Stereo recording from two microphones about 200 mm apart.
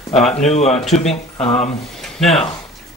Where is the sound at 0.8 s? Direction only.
Centre (ahead or behind).